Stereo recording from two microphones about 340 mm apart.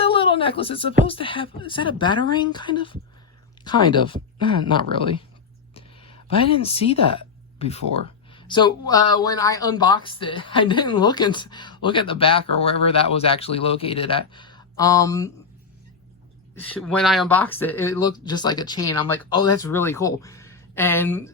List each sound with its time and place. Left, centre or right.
0.0 s a sound: centre
1.0 s speech: centre
16.6 s speech: centre